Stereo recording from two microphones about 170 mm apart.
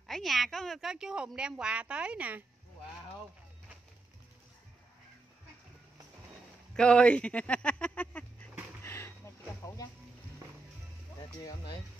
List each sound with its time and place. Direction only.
0.0 s a woman's voice: centre (ahead or behind)
6.7 s speech: 5° left (ahead or behind)
8.8 s a sound: 15° left (ahead or behind)
11.4 s speech: 25° left (ahead or behind)